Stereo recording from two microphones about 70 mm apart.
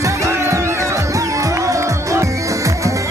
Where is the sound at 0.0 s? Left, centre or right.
Right.